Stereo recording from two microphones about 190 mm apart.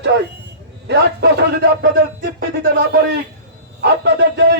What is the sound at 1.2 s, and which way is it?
Speech, 65° right (ahead or behind).